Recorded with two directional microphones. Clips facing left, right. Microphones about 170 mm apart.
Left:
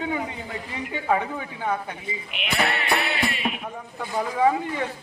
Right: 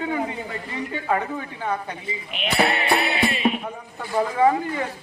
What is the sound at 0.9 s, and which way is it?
Speech, 10° left (ahead or behind).